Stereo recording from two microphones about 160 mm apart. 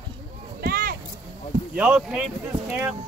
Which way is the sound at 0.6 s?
70° right (ahead or behind).